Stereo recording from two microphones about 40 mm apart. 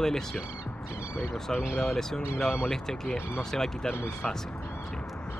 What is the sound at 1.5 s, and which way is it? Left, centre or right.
A man's voice, centre.